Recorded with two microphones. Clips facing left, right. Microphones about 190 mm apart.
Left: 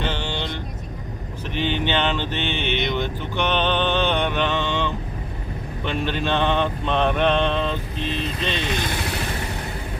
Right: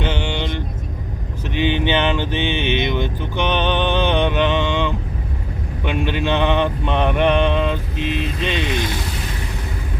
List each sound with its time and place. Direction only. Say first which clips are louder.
0.0 s vehicle: right 4 dB; 15° right (ahead or behind)
1.5 s speech: right 4 dB; 15° right (ahead or behind)
5.8 s mantra: right 3 dB; 15° right (ahead or behind)